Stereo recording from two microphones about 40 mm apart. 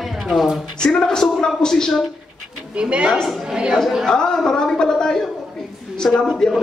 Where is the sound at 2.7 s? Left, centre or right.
Right.